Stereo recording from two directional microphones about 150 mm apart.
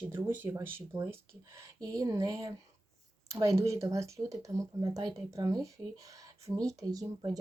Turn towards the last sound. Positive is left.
turn(degrees=-25)  # may be behind; listen again after turning